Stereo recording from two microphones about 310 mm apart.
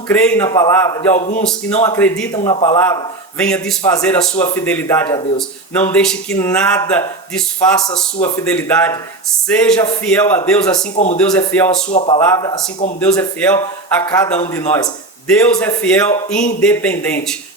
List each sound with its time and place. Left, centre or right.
0.1 s a man's voice: centre
1.1 s speech: left
1.9 s speech: centre
2.4 s a man's voice: centre
2.8 s speech: centre
10.9 s speech: left
11.2 s speech: centre
11.9 s speech: centre
12.2 s a man's voice: centre
15.3 s speech: centre